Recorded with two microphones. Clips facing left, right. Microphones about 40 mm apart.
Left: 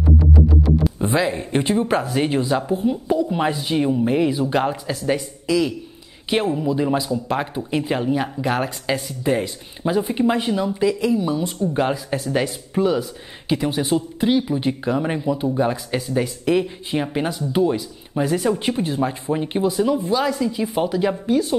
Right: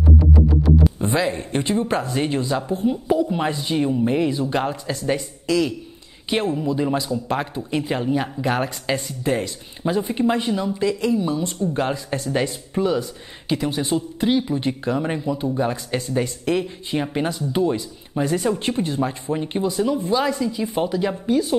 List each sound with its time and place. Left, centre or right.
0.8 s speech: centre